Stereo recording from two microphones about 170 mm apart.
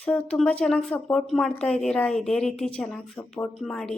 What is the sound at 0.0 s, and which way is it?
A woman's voice, 5° left (ahead or behind).